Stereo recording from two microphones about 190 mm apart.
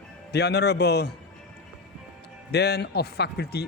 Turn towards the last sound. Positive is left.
turn(degrees=55)  # may be behind; listen again after turning